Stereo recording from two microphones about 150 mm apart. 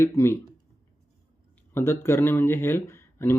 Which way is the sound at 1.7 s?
15° left (ahead or behind).